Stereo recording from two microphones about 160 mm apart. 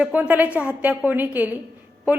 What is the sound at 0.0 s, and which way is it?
A woman's voice, 10° right (ahead or behind).